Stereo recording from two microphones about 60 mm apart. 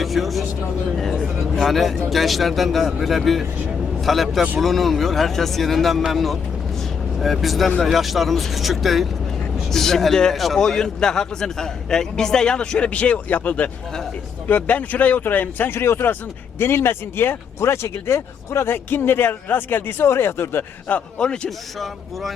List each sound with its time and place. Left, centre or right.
0.0 s a man's voice: centre; by 20.7 s left
20.8 s a man's voice: left